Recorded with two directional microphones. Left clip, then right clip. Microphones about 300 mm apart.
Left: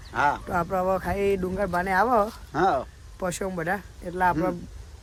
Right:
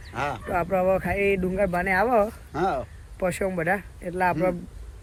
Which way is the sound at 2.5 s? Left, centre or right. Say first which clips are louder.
Left 3 dB; left.